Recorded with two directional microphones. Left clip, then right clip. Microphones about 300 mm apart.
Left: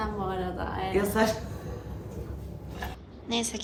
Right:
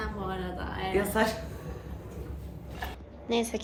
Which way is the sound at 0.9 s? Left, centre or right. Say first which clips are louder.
Left 1 dB; centre.